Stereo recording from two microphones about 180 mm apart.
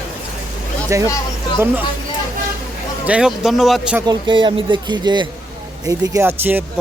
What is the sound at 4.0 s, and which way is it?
A man's voice, 25° right (ahead or behind).